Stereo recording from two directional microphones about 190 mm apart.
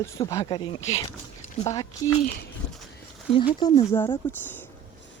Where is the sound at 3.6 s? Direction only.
20° left (ahead or behind).